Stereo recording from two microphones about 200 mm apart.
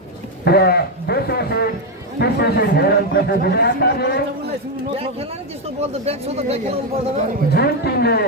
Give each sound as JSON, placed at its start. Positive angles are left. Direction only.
{"t": 0.4, "sound": "a man's voice", "side_deg": 50}
{"t": 5.8, "sound": "speech", "side_deg": -30}
{"t": 7.5, "sound": "a man's voice", "side_deg": 50}